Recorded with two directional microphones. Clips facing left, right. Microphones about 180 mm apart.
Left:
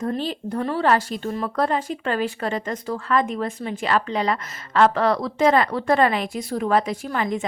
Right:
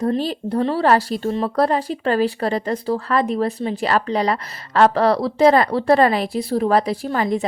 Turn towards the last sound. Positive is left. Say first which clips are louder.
# right 4 dB
turn(degrees=-35)  # may be behind; listen again after turning